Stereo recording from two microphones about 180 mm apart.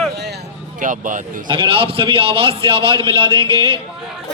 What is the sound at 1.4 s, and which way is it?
A man's voice, 30° right (ahead or behind).